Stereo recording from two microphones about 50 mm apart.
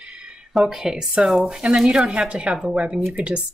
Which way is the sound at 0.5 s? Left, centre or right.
Centre.